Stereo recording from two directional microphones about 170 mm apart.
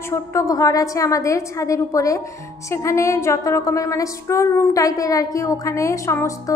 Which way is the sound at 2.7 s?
15° left (ahead or behind).